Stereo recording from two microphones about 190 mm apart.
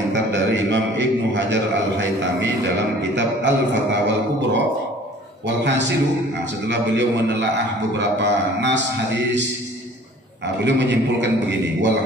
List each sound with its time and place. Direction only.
0.1 s a man's voice: 70° right (ahead or behind)